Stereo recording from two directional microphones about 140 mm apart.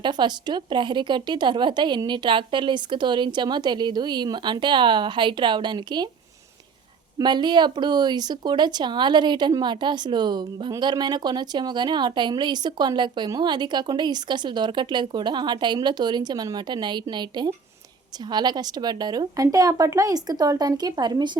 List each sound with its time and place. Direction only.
0.0 s a woman's voice: 30° right (ahead or behind)
7.2 s a woman's voice: 30° right (ahead or behind)